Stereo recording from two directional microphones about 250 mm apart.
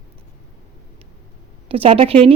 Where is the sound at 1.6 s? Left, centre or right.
Right.